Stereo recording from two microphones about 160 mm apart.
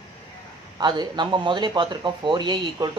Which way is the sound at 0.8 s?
30° right (ahead or behind).